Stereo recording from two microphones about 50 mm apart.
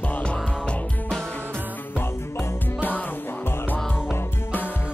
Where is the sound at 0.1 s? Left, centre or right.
Left.